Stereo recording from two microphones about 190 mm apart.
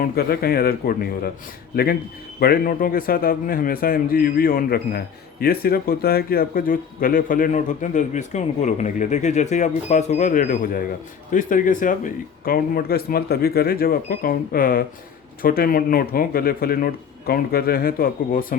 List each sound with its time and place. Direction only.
0.0 s a man's voice: 55° left (ahead or behind)